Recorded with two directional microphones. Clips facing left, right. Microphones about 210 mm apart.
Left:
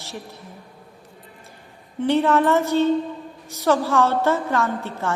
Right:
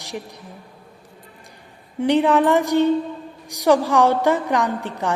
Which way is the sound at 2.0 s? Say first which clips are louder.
Right 2 dB; 15° right (ahead or behind).